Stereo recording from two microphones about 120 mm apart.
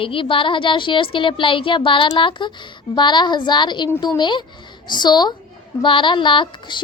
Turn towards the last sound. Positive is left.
turn(degrees=45)  # may be behind; listen again after turning